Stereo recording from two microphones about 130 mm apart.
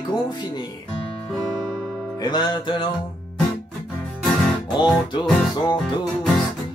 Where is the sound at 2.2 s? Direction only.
35° left (ahead or behind).